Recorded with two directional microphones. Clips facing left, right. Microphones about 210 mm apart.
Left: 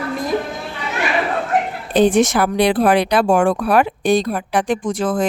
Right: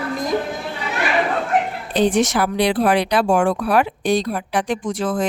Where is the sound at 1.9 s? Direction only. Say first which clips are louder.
Left 4 dB; 55° left (ahead or behind).